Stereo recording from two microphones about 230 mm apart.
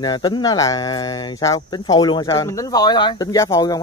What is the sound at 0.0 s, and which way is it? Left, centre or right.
Speech, centre.